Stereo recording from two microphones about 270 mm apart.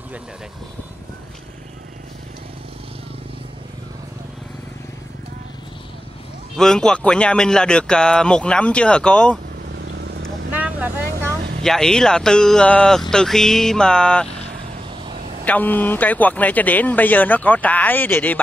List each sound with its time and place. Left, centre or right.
6.5 s a man's voice: centre
9.8 s vehicle: right
10.6 s vehicle: centre
11.6 s a man's voice: centre
15.4 s speech: centre